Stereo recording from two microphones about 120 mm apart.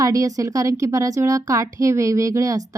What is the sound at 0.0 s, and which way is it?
A woman's voice, 30° right (ahead or behind).